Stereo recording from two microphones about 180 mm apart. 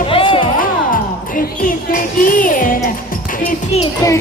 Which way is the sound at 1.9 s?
50° left (ahead or behind).